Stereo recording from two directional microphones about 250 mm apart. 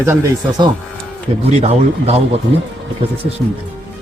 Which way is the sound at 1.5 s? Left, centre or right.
Right.